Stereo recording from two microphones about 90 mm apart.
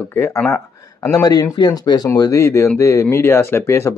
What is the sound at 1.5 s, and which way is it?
Speech, 50° left (ahead or behind).